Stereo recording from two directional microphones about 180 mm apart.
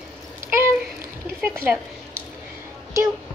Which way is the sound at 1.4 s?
15° right (ahead or behind).